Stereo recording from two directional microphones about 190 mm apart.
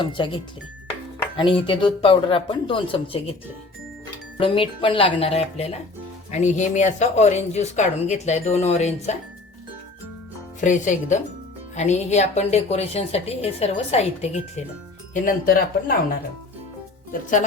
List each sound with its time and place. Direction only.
0.0 s speech: 25° left (ahead or behind)
4.4 s a woman's voice: 30° left (ahead or behind)
10.6 s a woman's voice: 40° left (ahead or behind)